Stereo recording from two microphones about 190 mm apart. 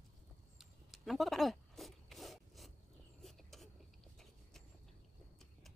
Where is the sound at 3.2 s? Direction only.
Centre (ahead or behind).